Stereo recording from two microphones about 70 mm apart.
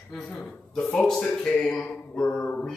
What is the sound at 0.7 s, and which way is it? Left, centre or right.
Speech, centre.